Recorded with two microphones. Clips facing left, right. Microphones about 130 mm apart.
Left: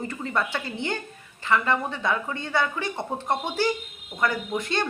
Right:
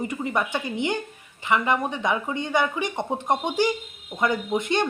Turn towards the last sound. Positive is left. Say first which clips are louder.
# right 4 dB
turn(degrees=-20)  # may be behind; listen again after turning